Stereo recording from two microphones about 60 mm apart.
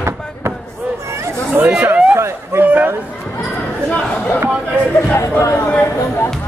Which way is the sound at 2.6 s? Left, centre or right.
Right.